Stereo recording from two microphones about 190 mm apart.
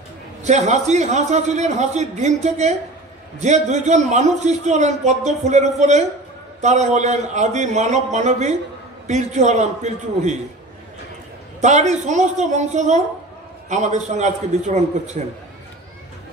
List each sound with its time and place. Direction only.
0.4 s a man's voice: 35° right (ahead or behind)
11.6 s a man's voice: 40° right (ahead or behind)